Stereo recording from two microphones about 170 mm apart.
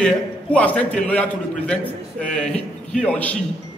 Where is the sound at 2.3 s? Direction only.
5° left (ahead or behind).